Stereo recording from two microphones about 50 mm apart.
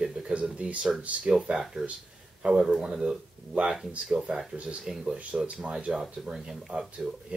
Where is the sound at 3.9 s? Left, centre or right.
Right.